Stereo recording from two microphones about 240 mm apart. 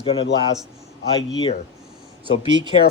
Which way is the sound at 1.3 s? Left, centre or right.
Centre.